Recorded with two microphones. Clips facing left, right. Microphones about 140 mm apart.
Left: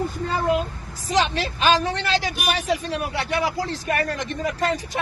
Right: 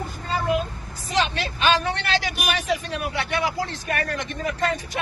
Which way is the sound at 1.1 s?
35° left (ahead or behind).